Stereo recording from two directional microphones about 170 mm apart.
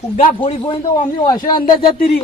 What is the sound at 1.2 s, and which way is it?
Speech, 25° left (ahead or behind).